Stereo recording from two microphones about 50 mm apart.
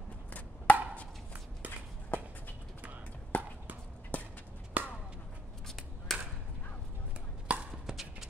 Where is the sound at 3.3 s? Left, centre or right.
Left.